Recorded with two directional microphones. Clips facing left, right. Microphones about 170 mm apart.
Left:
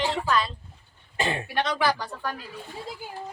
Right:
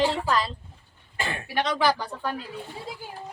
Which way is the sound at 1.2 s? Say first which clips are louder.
Left 4 dB; 20° left (ahead or behind).